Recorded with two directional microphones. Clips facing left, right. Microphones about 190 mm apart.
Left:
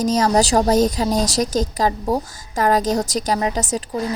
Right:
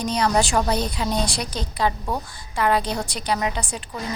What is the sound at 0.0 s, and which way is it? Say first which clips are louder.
A woman's voice: left 5 dB; 40° left (ahead or behind).